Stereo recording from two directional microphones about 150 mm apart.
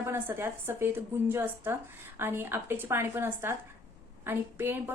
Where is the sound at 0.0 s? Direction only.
15° right (ahead or behind).